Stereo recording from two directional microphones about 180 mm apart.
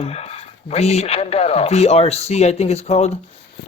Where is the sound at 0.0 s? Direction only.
35° left (ahead or behind).